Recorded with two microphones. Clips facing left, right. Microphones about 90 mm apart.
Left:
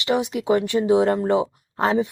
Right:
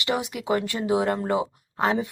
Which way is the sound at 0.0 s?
20° left (ahead or behind).